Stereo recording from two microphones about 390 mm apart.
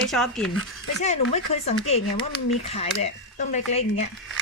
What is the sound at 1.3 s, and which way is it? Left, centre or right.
Speech, centre.